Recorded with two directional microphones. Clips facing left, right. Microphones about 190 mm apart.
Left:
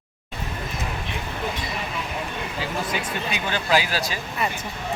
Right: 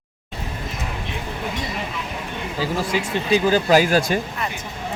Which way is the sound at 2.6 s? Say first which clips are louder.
Right 6 dB; 35° right (ahead or behind).